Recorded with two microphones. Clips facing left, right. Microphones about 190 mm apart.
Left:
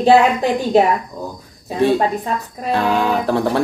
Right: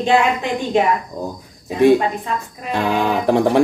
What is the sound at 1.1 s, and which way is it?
Speech, 20° right (ahead or behind).